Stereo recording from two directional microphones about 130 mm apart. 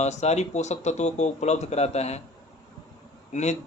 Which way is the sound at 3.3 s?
60° left (ahead or behind).